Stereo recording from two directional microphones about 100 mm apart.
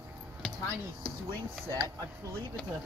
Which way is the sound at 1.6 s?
40° right (ahead or behind).